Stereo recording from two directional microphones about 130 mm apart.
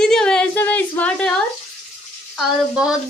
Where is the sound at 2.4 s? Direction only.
5° right (ahead or behind).